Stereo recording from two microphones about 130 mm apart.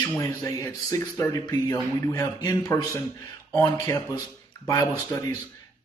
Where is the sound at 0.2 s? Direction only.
20° left (ahead or behind).